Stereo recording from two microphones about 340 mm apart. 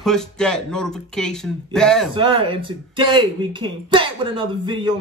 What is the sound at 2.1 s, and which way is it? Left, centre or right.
Speech, centre.